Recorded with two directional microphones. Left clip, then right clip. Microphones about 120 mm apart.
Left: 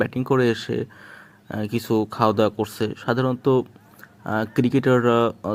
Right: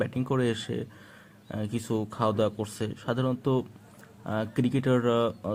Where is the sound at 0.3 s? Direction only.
25° left (ahead or behind).